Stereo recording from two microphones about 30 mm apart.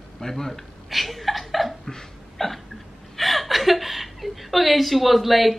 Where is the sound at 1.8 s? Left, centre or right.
Centre.